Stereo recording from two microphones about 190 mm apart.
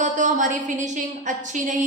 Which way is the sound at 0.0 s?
40° right (ahead or behind).